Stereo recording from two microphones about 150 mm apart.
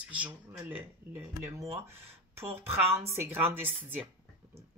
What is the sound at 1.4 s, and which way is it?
Speech, 15° right (ahead or behind).